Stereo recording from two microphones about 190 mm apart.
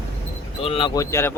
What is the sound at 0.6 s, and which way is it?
Speech, 30° left (ahead or behind).